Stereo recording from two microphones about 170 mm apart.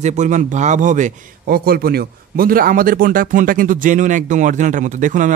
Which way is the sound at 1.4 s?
65° right (ahead or behind).